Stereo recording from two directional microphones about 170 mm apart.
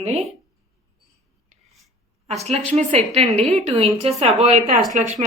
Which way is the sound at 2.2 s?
40° right (ahead or behind).